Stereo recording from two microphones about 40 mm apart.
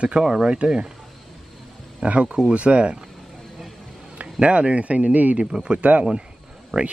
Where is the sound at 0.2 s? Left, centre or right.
Centre.